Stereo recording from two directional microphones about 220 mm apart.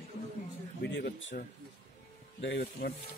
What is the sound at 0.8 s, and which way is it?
Speech, 55° left (ahead or behind).